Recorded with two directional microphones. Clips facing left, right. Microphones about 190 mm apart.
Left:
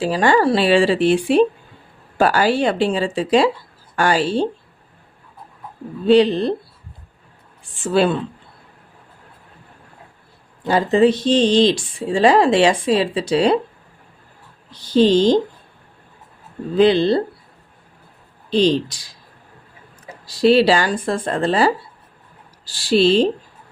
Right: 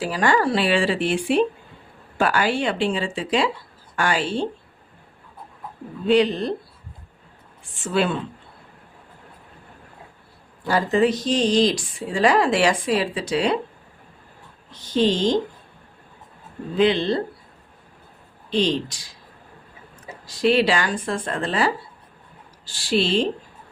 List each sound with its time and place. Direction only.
0.0 s speech: 30° left (ahead or behind)
6.1 s speech: 30° left (ahead or behind)
7.9 s speech: 35° left (ahead or behind)
10.6 s speech: 25° left (ahead or behind)
14.7 s speech: 35° left (ahead or behind)
16.7 s speech: 35° left (ahead or behind)
18.5 s speech: 35° left (ahead or behind)
20.2 s speech: 35° left (ahead or behind)